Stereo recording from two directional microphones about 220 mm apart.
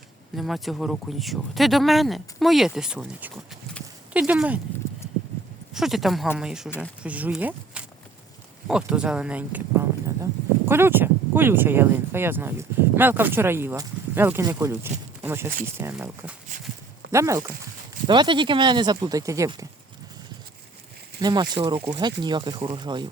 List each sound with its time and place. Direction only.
0.3 s speech: centre (ahead or behind)
5.7 s speech: centre (ahead or behind)
21.2 s speech: 20° right (ahead or behind)